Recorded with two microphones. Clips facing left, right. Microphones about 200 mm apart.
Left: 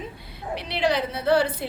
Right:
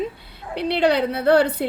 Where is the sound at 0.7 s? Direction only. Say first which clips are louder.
Right 6 dB; 60° right (ahead or behind).